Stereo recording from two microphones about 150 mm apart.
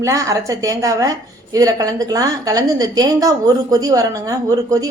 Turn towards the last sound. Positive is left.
turn(degrees=-20)  # may be behind; listen again after turning